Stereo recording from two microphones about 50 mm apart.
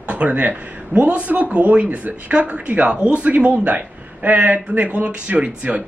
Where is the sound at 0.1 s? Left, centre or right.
Right.